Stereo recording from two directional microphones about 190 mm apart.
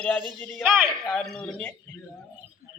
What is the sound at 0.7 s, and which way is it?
A man's voice, centre (ahead or behind).